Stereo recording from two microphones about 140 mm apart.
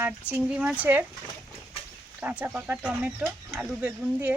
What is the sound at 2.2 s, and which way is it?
Speech, 10° right (ahead or behind).